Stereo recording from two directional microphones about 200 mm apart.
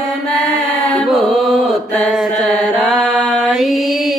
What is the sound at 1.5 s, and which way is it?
Mantra, centre (ahead or behind).